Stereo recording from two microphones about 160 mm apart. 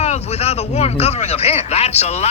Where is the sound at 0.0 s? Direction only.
40° left (ahead or behind).